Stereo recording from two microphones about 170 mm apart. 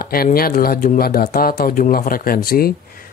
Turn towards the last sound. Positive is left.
turn(degrees=60)  # may be behind; listen again after turning